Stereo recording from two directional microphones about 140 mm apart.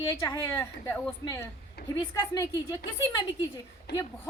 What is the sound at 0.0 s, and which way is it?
Speech, 20° left (ahead or behind).